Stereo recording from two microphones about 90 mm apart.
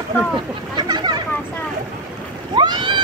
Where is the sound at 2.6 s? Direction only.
60° right (ahead or behind).